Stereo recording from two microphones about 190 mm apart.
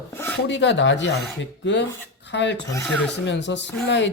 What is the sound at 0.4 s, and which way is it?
Speech, 70° left (ahead or behind).